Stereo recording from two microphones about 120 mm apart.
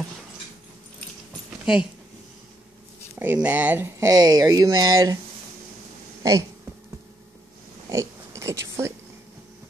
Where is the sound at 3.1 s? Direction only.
15° right (ahead or behind).